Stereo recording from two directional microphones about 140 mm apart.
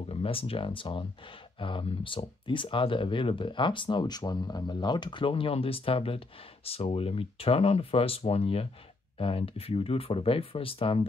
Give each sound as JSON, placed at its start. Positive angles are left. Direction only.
{"t": 0.1, "sound": "speech", "side_deg": 40}